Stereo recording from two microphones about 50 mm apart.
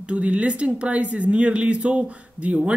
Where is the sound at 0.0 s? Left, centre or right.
Right.